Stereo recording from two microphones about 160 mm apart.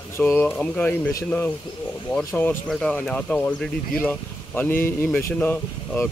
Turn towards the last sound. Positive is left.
turn(degrees=10)  # may be behind; listen again after turning